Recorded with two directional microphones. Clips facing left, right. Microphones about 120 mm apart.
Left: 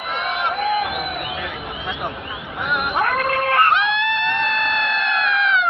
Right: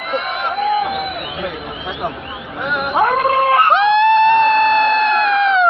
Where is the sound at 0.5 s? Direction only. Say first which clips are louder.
Right 6 dB; centre (ahead or behind).